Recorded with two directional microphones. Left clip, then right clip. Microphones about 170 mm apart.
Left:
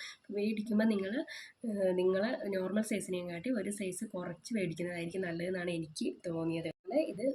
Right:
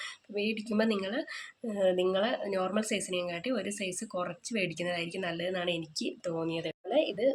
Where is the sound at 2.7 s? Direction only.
45° right (ahead or behind).